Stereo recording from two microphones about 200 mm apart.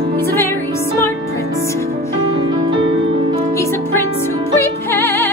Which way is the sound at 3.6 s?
10° left (ahead or behind).